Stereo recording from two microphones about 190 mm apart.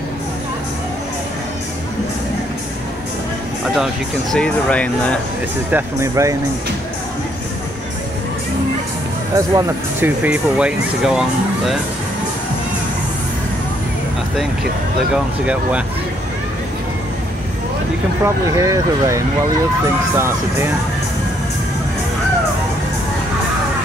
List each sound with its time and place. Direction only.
3.7 s speech: centre (ahead or behind)
5.7 s speech: 10° right (ahead or behind)
9.3 s speech: 15° right (ahead or behind)
18.2 s speech: 15° right (ahead or behind)